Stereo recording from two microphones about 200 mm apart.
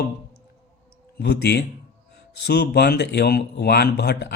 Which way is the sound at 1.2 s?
55° left (ahead or behind).